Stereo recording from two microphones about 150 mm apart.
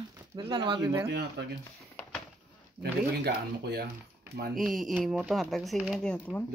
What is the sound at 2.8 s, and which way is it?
Speech, 90° right.